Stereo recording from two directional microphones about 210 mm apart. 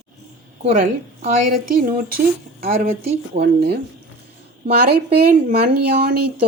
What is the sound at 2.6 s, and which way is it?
A woman's voice, 30° right (ahead or behind).